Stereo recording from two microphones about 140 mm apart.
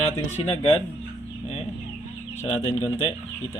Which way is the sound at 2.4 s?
40° left (ahead or behind).